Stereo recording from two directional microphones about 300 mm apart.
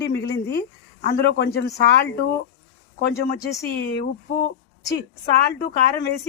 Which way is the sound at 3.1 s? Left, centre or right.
Centre.